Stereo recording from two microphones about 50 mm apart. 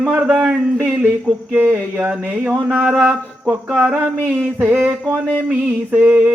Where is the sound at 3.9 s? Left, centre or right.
Right.